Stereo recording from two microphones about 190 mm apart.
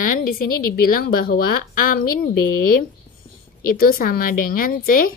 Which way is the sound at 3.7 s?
50° left (ahead or behind).